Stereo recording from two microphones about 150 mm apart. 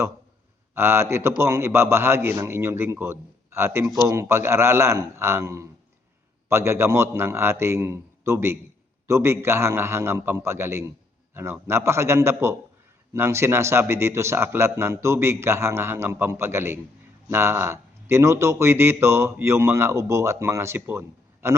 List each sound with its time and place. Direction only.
0.7 s a man's voice: 15° right (ahead or behind)